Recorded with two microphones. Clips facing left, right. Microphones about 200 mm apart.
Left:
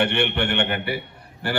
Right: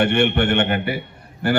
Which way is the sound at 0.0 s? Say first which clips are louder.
Right 5 dB; 45° right (ahead or behind).